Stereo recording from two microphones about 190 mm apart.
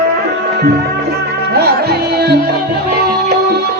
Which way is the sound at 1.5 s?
55° right (ahead or behind).